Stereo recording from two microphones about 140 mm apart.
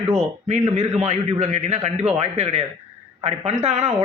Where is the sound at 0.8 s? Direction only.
50° right (ahead or behind).